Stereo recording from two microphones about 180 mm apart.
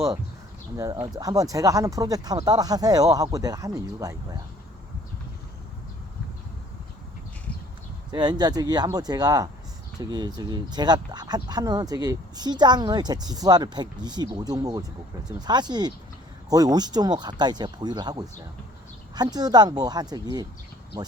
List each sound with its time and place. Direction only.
0.8 s speech: 20° right (ahead or behind)
8.1 s speech: 25° right (ahead or behind)